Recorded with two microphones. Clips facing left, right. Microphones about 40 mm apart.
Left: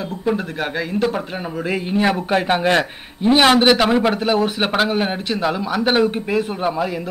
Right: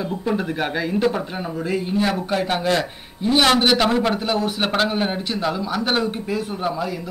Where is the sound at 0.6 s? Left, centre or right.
Centre.